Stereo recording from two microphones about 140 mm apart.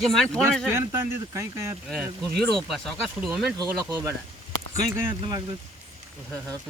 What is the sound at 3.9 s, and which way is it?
Speech, 20° right (ahead or behind).